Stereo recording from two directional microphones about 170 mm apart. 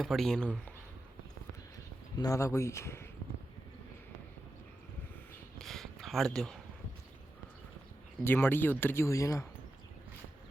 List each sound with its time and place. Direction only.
0.0 s speech: centre (ahead or behind)
2.1 s speech: 20° left (ahead or behind)
5.5 s a sound: centre (ahead or behind)
8.2 s speech: 15° left (ahead or behind)